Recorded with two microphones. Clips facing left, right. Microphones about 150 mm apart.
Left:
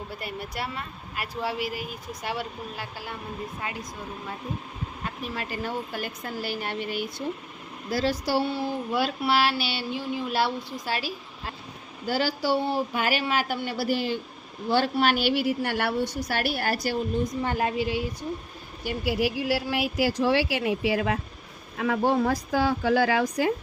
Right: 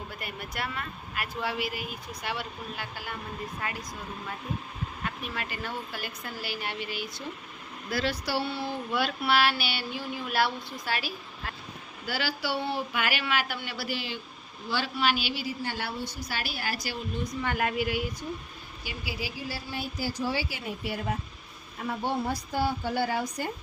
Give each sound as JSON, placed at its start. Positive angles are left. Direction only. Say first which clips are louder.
{"t": 0.2, "sound": "speech", "louder": "left 2 dB", "side_deg": 35}
{"t": 5.0, "sound": "speech", "louder": "left 3 dB", "side_deg": 35}
{"t": 7.9, "sound": "speech", "louder": "left 4 dB", "side_deg": 40}
{"t": 12.0, "sound": "a woman's voice", "louder": "left 6 dB", "side_deg": 40}
{"t": 17.4, "sound": "speech", "louder": "left 3 dB", "side_deg": 30}
{"t": 18.8, "sound": "a woman's voice", "louder": "left 11 dB", "side_deg": 60}